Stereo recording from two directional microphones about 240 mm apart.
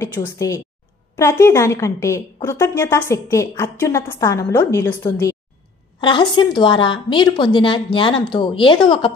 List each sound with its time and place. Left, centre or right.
0.0 s a woman's voice: centre